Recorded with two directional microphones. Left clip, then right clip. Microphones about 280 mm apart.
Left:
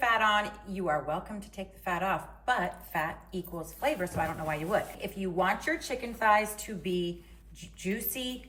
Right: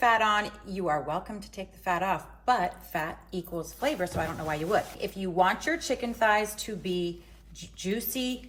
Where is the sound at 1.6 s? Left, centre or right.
Centre.